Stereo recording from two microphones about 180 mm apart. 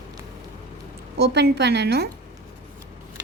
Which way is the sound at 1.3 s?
70° right (ahead or behind).